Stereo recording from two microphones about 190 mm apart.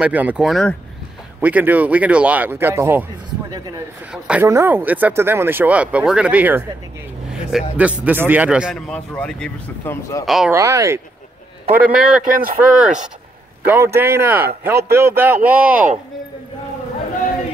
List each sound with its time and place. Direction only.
0.0 s speech: 10° right (ahead or behind)
4.1 s speech: 5° right (ahead or behind)
10.5 s speech: 15° right (ahead or behind)
11.7 s speech: 5° right (ahead or behind)